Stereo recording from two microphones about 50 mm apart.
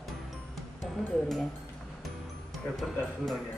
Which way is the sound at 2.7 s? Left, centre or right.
Centre.